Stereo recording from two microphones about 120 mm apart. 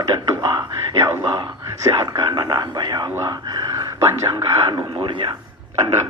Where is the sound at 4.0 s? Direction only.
25° right (ahead or behind).